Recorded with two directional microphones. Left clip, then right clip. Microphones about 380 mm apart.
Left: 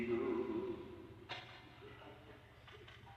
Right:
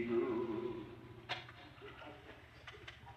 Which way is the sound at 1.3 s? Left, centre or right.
Centre.